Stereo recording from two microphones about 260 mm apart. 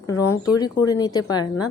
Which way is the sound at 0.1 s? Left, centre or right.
Centre.